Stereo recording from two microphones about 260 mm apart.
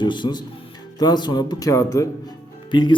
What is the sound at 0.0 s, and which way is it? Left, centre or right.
A man's voice, centre.